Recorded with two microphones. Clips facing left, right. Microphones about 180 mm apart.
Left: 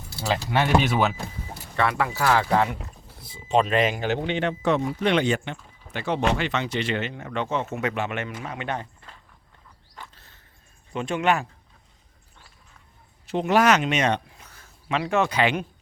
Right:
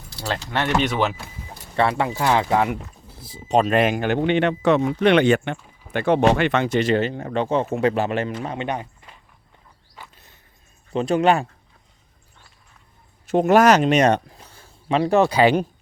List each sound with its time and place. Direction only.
0.2 s speech: 10° left (ahead or behind)
1.7 s speech: 30° right (ahead or behind); by 2.7 s 15° right (ahead or behind)
3.5 s speech: 45° right (ahead or behind); by 8.6 s 30° right (ahead or behind)
8.6 s a sound: 15° right (ahead or behind)
10.9 s speech: 35° right (ahead or behind)
13.2 s speech: 45° right (ahead or behind)